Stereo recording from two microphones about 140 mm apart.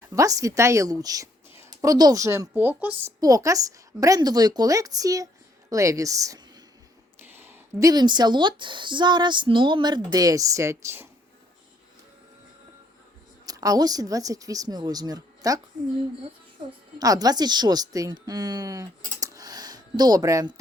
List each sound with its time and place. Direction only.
0.1 s a woman's voice: 25° right (ahead or behind)
3.2 s a woman's voice: 25° right (ahead or behind)
7.2 s a sound: 15° right (ahead or behind)
7.9 s a woman's voice: 30° right (ahead or behind)
13.4 s a woman's voice: 25° right (ahead or behind)
17.0 s a woman's voice: 25° right (ahead or behind)